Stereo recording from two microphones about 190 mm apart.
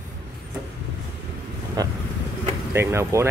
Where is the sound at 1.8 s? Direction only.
20° right (ahead or behind).